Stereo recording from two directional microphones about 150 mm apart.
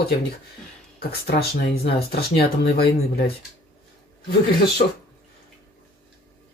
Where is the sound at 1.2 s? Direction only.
90° left.